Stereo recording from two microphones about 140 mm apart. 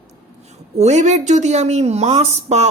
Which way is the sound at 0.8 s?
55° right (ahead or behind).